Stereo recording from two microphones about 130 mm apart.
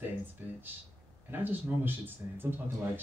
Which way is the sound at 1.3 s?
15° right (ahead or behind).